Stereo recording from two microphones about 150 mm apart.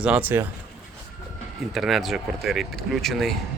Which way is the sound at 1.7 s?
Centre (ahead or behind).